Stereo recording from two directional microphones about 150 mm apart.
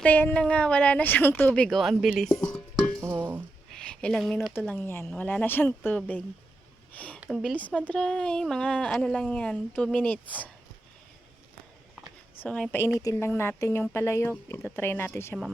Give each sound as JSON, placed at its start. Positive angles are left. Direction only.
{"t": 0.0, "sound": "a woman's voice", "side_deg": 10}
{"t": 3.0, "sound": "dishes", "side_deg": -15}
{"t": 3.7, "sound": "a sound", "side_deg": 5}
{"t": 4.7, "sound": "a woman's voice", "side_deg": 15}
{"t": 7.2, "sound": "speech", "side_deg": 0}
{"t": 7.6, "sound": "speech", "side_deg": 10}
{"t": 12.4, "sound": "speech", "side_deg": 5}
{"t": 13.0, "sound": "a woman's voice", "side_deg": 20}